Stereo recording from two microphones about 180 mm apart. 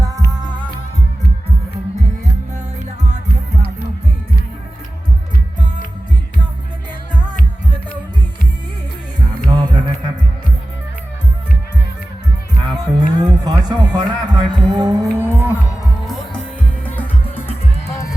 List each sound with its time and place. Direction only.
9.5 s music: 25° right (ahead or behind)
12.6 s music: 20° right (ahead or behind)
16.8 s music: 10° left (ahead or behind)